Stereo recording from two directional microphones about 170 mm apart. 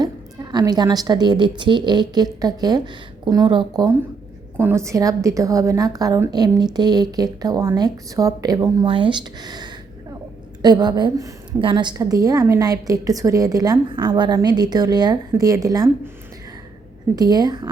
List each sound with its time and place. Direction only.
0.0 s a woman's voice: 25° right (ahead or behind)
4.5 s a woman's voice: 15° right (ahead or behind)
17.2 s a woman's voice: 25° right (ahead or behind)